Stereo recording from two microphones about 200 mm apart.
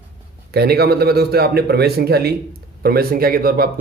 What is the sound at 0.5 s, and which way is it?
Speech, 50° right (ahead or behind).